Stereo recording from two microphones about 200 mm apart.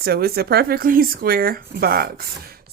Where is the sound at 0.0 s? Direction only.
50° right (ahead or behind).